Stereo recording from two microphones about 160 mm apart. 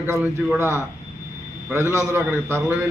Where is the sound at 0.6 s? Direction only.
15° right (ahead or behind).